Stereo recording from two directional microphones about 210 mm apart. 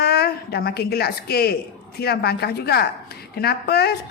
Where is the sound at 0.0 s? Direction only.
50° left (ahead or behind).